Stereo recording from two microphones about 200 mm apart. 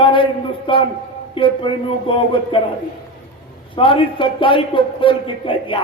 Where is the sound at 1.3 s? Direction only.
25° left (ahead or behind).